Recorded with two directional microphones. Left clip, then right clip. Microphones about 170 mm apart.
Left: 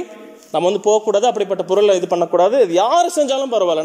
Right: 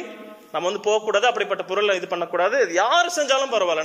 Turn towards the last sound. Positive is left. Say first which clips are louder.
# left 4 dB
turn(degrees=30)  # may be behind; listen again after turning